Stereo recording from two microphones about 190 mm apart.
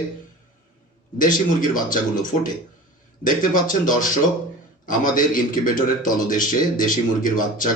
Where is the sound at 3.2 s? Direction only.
45° left (ahead or behind).